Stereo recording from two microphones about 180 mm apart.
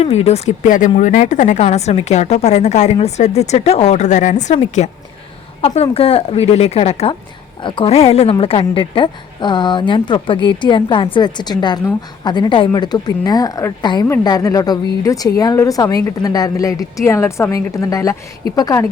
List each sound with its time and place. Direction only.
0.0 s a woman's voice: 35° left (ahead or behind); by 18.9 s 20° left (ahead or behind)